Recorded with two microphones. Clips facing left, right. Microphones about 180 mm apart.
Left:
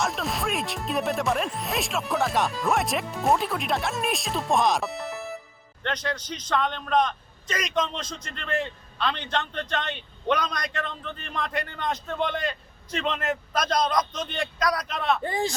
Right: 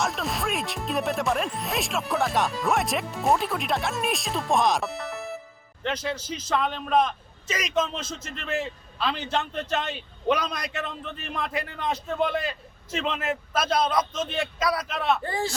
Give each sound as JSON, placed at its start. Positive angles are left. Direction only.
{"t": 0.0, "sound": "a man's voice", "side_deg": 0}
{"t": 15.2, "sound": "speech", "side_deg": 20}